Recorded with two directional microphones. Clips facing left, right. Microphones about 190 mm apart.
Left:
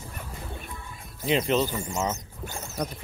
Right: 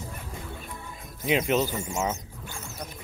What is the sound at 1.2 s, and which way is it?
Speech, 10° right (ahead or behind).